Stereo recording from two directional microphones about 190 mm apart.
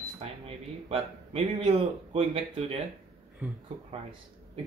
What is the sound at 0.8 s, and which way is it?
Speech, 30° right (ahead or behind).